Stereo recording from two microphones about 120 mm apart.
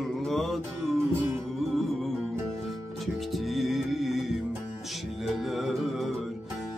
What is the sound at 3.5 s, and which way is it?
Music, centre (ahead or behind).